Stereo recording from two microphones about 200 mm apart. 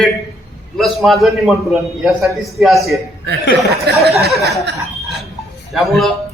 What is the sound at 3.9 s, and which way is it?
Speech, 55° right (ahead or behind).